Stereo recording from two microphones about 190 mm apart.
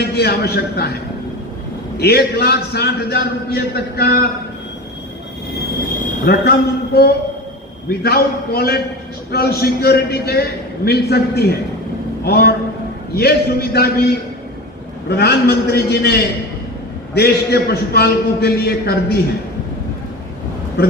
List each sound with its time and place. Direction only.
0.0 s a man's voice: 55° left (ahead or behind)
2.0 s a man's voice: 55° left (ahead or behind)
6.2 s a man's voice: 55° left (ahead or behind)
15.1 s a man's voice: 55° left (ahead or behind)